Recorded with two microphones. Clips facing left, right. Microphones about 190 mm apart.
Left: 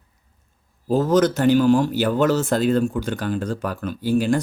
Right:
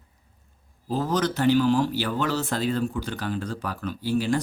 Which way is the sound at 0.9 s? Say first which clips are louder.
Left 8 dB; 45° left (ahead or behind).